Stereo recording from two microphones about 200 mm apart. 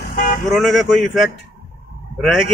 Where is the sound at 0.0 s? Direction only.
45° left (ahead or behind).